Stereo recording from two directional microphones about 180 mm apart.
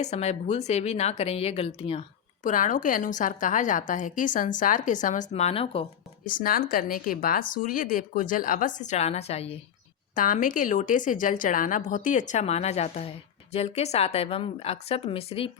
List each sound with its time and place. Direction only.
0.0 s a woman's voice: 35° left (ahead or behind)
6.2 s a woman's voice: 50° left (ahead or behind); by 9.6 s 35° left (ahead or behind)
10.2 s a woman's voice: 50° left (ahead or behind); by 15.4 s 30° left (ahead or behind)